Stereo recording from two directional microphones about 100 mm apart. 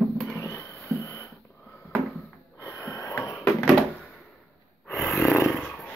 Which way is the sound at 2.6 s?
30° left (ahead or behind).